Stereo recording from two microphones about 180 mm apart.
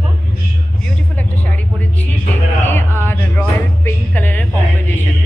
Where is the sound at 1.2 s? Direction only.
10° left (ahead or behind).